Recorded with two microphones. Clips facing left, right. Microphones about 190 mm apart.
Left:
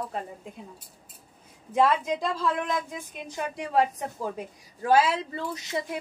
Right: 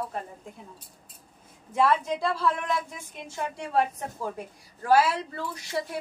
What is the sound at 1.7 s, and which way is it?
A woman's voice, 15° left (ahead or behind).